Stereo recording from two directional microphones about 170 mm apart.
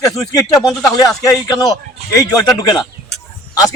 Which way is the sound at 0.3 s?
20° left (ahead or behind).